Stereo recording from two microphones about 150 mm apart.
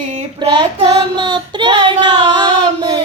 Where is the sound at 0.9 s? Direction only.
30° right (ahead or behind).